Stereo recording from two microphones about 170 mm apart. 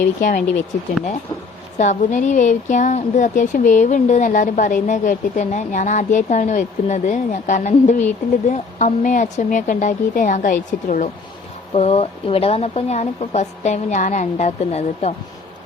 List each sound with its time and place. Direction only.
0.2 s speech: 50° left (ahead or behind)
1.8 s speech: 45° left (ahead or behind)
11.7 s a woman's voice: 35° left (ahead or behind)